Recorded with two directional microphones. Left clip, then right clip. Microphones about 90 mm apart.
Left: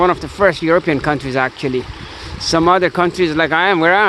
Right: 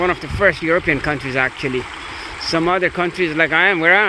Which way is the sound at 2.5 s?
65° left (ahead or behind).